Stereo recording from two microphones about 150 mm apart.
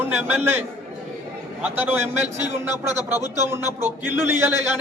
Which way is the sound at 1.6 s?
10° right (ahead or behind).